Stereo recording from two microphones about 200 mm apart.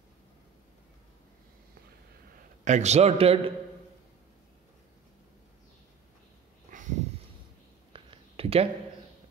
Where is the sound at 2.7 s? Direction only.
35° right (ahead or behind).